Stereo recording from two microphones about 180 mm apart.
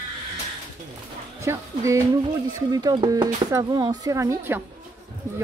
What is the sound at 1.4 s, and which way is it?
Speech, 15° right (ahead or behind).